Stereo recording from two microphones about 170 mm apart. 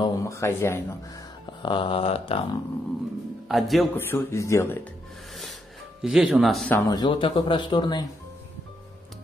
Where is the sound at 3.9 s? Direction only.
15° left (ahead or behind).